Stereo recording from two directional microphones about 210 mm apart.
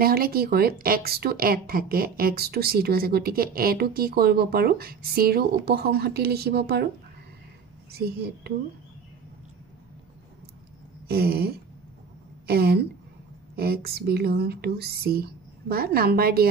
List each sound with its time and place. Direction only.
0.0 s speech: 45° right (ahead or behind)
7.9 s speech: 50° right (ahead or behind)
11.1 s speech: 45° right (ahead or behind)